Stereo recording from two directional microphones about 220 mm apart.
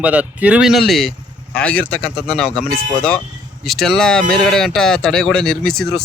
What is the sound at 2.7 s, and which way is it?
Speech, 40° right (ahead or behind).